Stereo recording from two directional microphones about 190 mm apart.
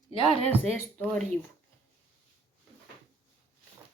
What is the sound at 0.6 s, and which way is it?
Speech, 10° left (ahead or behind).